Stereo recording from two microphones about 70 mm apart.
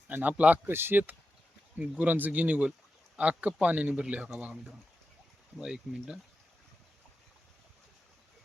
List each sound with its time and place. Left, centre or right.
0.1 s speech: right
5.5 s speech: centre